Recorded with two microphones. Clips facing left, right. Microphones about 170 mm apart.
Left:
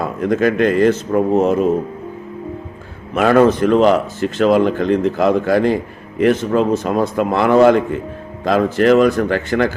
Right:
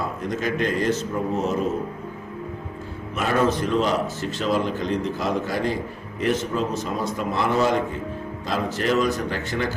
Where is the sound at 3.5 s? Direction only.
65° left (ahead or behind).